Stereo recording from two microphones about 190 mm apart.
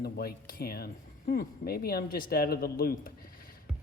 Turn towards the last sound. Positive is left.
turn(degrees=50)  # may be behind; listen again after turning